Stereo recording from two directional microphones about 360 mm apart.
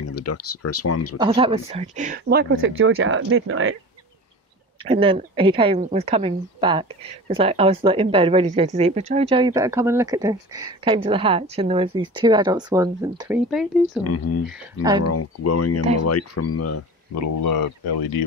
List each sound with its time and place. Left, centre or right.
0.1 s speech: left
1.1 s speech: centre; by 3.7 s right
4.8 s speech: centre
14.0 s speech: left
14.4 s speech: centre
15.0 s speech: left